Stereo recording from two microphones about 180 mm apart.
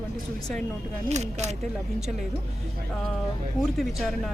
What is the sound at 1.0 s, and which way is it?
Speech, 40° right (ahead or behind).